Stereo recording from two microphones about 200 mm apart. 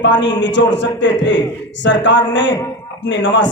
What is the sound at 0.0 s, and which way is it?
A man's voice, 65° left (ahead or behind).